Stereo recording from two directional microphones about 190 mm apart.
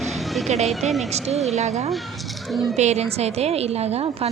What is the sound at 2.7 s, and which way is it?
A woman's voice, 35° right (ahead or behind).